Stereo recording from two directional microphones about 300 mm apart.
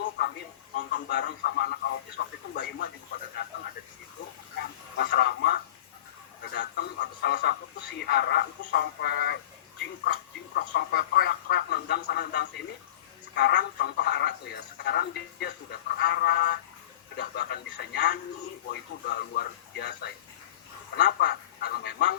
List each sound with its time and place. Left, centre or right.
0.8 s speech: left
4.9 s speech: left
10.5 s speech: left